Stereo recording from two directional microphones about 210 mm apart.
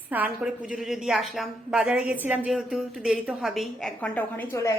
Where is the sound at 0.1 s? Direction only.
5° right (ahead or behind).